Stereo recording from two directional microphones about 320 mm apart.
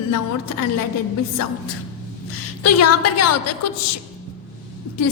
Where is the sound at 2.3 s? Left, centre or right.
Left.